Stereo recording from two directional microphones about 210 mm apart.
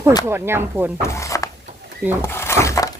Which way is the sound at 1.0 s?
15° left (ahead or behind).